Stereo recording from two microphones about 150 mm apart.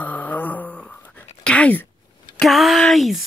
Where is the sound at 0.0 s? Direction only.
10° left (ahead or behind).